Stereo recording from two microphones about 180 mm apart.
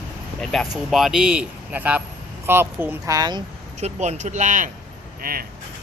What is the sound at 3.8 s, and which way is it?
Speech, 40° right (ahead or behind).